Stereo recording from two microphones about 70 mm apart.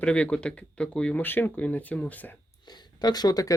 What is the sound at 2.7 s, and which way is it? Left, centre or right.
Speech, left.